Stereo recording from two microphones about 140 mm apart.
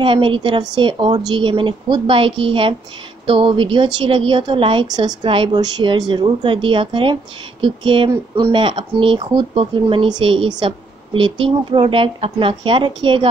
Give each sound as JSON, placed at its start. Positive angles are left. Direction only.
{"t": 0.0, "sound": "a woman's voice", "side_deg": -40}